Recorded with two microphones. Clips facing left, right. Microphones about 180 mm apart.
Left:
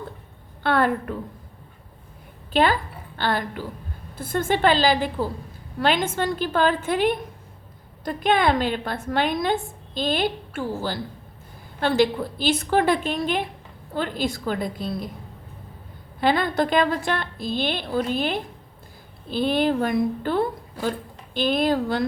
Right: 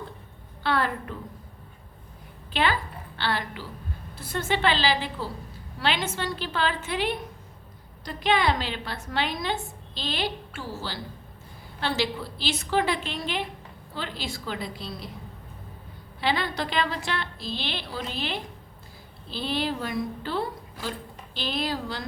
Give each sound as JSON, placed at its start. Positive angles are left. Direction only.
{"t": 0.6, "sound": "a sound", "side_deg": 50}
{"t": 2.5, "sound": "a woman's voice", "side_deg": 45}
{"t": 16.2, "sound": "a woman's voice", "side_deg": 50}